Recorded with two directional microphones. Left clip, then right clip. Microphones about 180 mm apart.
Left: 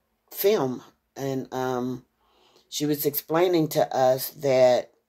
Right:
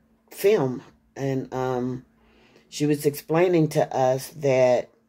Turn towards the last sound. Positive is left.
turn(degrees=10)  # may be behind; listen again after turning